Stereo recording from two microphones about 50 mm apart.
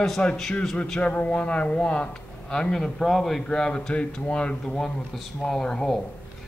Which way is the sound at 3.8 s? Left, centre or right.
Left.